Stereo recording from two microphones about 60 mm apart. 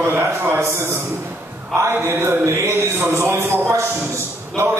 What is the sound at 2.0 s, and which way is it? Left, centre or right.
Speech, right.